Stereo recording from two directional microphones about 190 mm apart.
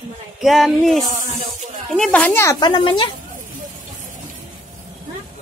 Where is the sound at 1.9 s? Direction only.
5° left (ahead or behind); by 3.0 s 25° left (ahead or behind).